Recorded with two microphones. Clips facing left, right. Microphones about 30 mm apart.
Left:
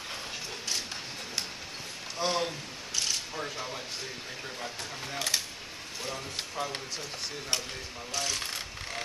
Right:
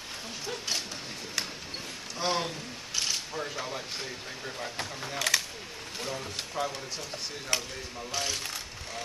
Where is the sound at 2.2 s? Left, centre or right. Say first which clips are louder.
Even; centre.